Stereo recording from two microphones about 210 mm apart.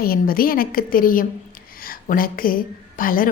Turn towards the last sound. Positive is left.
turn(degrees=40)  # may be behind; listen again after turning